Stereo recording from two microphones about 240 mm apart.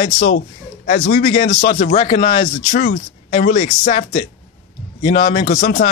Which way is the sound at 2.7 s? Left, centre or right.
Left.